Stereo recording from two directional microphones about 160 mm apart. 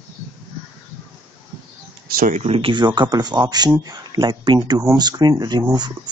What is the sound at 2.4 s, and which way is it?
Speech, 35° right (ahead or behind).